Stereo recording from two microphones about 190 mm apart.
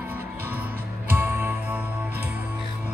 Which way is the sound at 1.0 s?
10° right (ahead or behind).